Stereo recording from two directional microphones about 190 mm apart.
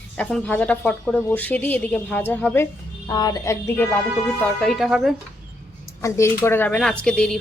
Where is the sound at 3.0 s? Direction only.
20° left (ahead or behind).